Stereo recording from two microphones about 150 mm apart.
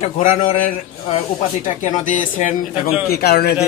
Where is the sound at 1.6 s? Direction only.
55° left (ahead or behind); by 3.5 s 90° left.